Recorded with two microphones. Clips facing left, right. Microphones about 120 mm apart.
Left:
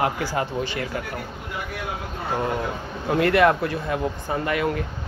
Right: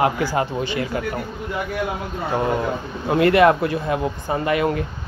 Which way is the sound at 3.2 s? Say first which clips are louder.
Right 4 dB; 15° right (ahead or behind).